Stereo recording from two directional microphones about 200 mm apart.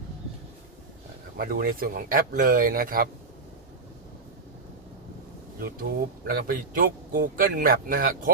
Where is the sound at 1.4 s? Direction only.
45° right (ahead or behind).